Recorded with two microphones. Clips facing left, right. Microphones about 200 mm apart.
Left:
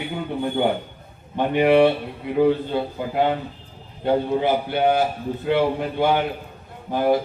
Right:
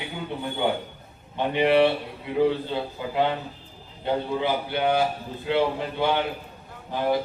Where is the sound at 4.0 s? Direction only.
50° left (ahead or behind).